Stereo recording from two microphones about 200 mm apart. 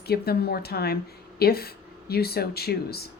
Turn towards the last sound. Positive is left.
turn(degrees=50)  # may be behind; listen again after turning